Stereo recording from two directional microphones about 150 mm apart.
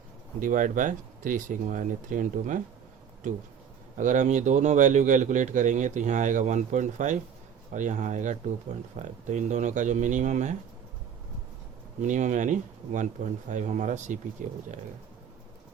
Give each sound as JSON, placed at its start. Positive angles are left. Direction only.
{"t": 0.3, "sound": "a man's voice", "side_deg": -60}
{"t": 3.9, "sound": "a man's voice", "side_deg": -55}
{"t": 12.0, "sound": "a man's voice", "side_deg": -55}